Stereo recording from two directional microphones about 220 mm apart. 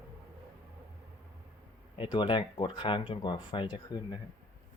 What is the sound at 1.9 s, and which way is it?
Speech, 20° left (ahead or behind).